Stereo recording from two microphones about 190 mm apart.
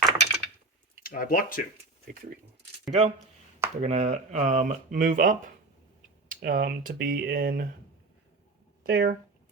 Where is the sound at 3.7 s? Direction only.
35° right (ahead or behind); by 7.7 s 50° right (ahead or behind).